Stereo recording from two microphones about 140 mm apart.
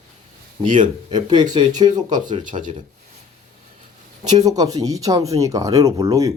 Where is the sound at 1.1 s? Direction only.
30° right (ahead or behind).